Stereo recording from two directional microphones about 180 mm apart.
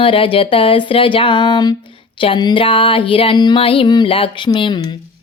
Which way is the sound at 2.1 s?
30° left (ahead or behind).